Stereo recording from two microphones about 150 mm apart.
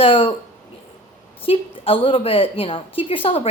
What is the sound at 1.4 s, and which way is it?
A woman's voice, 40° left (ahead or behind).